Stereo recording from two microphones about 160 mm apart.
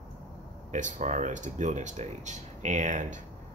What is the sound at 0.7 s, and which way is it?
Speech, 50° right (ahead or behind).